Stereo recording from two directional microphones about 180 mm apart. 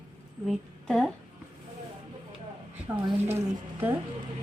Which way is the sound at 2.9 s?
15° right (ahead or behind).